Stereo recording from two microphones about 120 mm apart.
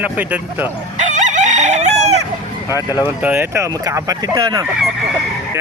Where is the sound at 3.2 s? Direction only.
15° right (ahead or behind).